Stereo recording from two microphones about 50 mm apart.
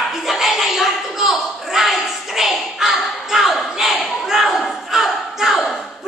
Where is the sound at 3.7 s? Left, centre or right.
Centre.